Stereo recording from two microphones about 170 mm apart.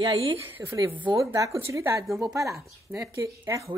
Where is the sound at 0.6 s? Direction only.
10° right (ahead or behind).